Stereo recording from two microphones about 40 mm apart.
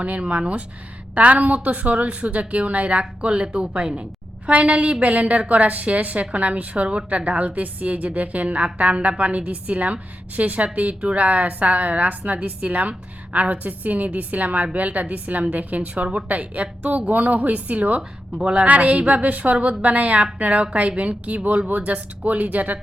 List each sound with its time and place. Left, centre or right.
0.0 s a woman's voice: right